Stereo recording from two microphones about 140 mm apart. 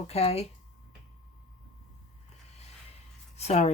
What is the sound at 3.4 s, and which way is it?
Speech, 50° left (ahead or behind).